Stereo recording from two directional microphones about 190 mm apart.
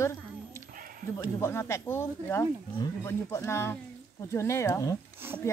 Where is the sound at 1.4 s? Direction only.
15° left (ahead or behind).